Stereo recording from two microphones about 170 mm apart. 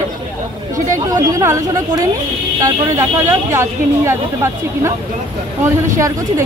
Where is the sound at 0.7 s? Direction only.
20° right (ahead or behind).